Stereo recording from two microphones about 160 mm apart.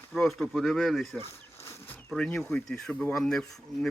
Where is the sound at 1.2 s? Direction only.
15° left (ahead or behind).